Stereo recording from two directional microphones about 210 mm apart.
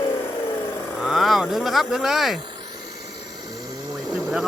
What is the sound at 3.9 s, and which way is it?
Vehicle, 5° left (ahead or behind).